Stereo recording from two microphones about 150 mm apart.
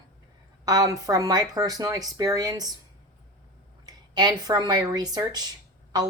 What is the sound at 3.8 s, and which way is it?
Speech, 25° right (ahead or behind).